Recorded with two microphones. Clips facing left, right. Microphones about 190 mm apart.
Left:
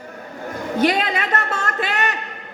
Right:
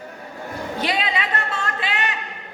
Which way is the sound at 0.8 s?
45° left (ahead or behind).